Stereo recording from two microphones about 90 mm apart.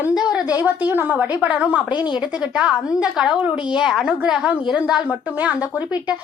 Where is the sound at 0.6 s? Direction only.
20° right (ahead or behind).